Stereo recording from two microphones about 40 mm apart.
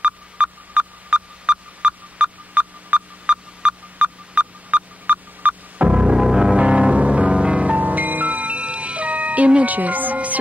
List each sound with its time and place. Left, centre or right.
0.0 s sonar: right
6.1 s music: centre
6.5 s music: right
7.8 s music: right